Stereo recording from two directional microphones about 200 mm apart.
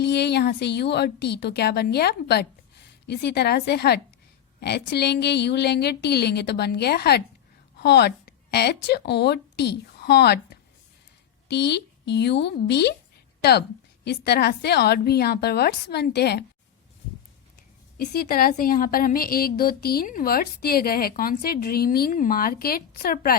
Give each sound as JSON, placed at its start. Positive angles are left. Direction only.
{"t": 0.0, "sound": "a woman's voice", "side_deg": 55}
{"t": 17.9, "sound": "a woman's voice", "side_deg": 50}